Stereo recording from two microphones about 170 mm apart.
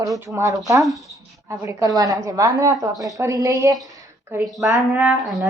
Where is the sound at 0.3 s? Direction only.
20° right (ahead or behind).